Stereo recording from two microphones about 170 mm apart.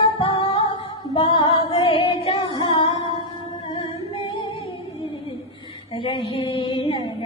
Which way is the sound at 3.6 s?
35° left (ahead or behind).